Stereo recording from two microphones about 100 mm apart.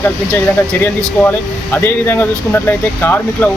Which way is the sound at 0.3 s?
20° left (ahead or behind).